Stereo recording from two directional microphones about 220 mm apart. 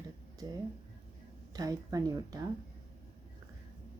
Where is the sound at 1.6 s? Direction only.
15° right (ahead or behind).